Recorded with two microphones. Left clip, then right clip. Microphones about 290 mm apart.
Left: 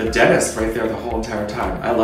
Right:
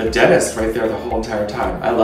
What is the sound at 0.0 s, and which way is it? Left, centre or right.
Speech, centre.